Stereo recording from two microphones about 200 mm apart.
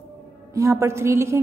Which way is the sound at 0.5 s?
15° right (ahead or behind).